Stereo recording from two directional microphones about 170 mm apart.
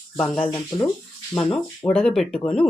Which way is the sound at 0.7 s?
30° left (ahead or behind).